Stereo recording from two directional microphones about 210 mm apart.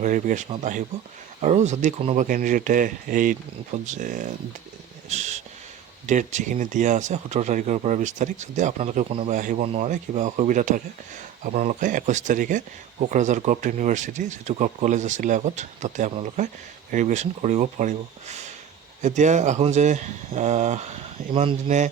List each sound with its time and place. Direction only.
0.0 s speech: 35° right (ahead or behind)
5.0 s a sound: 35° right (ahead or behind)
6.1 s speech: 35° right (ahead or behind)